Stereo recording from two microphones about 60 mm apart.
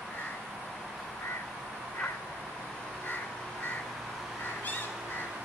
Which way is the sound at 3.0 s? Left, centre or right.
Left.